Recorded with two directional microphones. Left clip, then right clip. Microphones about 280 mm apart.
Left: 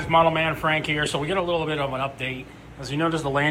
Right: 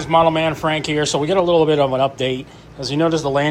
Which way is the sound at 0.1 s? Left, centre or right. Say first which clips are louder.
Right 5 dB; centre.